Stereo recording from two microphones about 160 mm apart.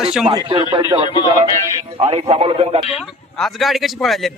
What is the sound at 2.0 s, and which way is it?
Speech, 40° right (ahead or behind).